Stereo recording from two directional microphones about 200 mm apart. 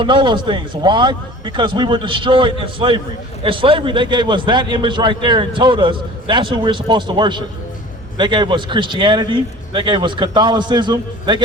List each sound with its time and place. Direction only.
0.0 s a man's voice: 25° right (ahead or behind)